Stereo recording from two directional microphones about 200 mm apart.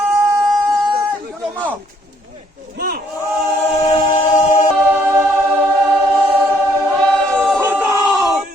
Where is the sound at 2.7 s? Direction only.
50° right (ahead or behind).